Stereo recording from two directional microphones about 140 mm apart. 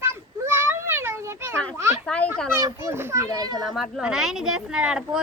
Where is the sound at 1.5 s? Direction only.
10° left (ahead or behind).